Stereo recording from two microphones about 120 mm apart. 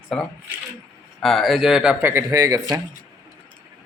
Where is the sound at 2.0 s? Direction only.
20° right (ahead or behind).